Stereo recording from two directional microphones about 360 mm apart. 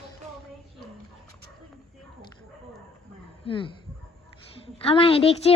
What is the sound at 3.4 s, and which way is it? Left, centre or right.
Speech, centre.